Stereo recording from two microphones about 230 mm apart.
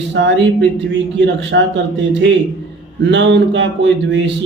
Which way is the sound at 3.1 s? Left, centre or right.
Right.